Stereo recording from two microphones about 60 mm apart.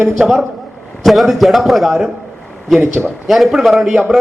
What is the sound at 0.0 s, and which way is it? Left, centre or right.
A man's voice, centre.